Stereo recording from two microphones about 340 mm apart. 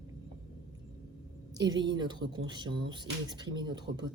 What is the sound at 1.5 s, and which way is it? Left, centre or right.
Speech, centre.